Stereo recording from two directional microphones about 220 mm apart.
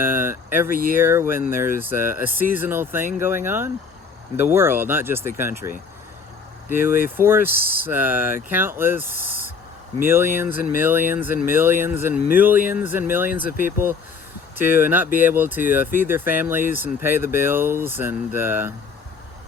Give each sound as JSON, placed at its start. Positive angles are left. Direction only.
{"t": 0.0, "sound": "speech", "side_deg": -10}